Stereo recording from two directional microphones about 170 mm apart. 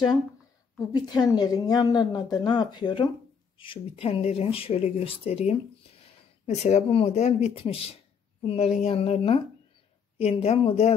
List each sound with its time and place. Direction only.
0.7 s a woman's voice: 25° left (ahead or behind)